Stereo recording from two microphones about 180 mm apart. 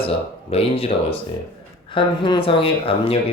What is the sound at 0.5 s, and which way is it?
Speech, 35° left (ahead or behind).